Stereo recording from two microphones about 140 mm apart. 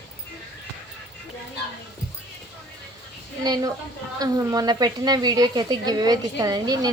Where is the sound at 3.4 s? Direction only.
30° right (ahead or behind).